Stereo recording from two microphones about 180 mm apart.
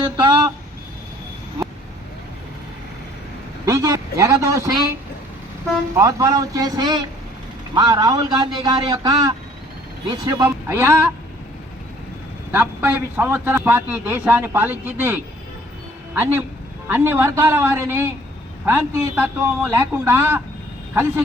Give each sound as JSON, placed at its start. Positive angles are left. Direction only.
{"t": 0.2, "sound": "speech", "side_deg": -25}
{"t": 3.7, "sound": "a man's voice", "side_deg": -15}
{"t": 6.0, "sound": "a man's voice", "side_deg": -20}
{"t": 12.5, "sound": "a man's voice", "side_deg": -10}